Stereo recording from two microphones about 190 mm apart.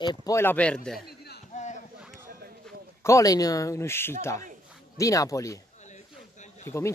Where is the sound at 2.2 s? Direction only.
50° right (ahead or behind).